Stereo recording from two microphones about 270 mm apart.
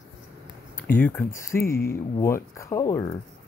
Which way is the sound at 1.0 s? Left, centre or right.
Centre.